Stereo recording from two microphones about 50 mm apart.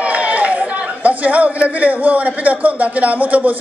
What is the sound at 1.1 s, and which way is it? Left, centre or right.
A man's voice, right.